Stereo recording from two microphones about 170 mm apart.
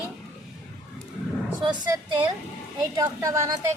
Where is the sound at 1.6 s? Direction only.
25° right (ahead or behind).